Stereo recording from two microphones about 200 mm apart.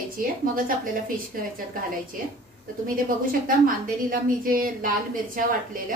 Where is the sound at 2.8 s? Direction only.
45° right (ahead or behind).